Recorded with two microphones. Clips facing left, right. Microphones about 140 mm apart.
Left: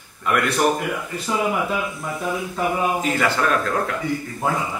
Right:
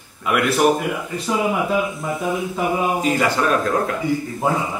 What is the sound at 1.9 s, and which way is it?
Speech, centre (ahead or behind).